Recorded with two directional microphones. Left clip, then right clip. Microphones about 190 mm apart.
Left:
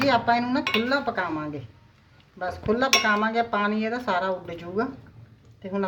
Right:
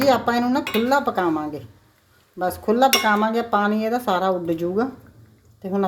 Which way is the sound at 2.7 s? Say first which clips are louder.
Right 4 dB; 45° right (ahead or behind).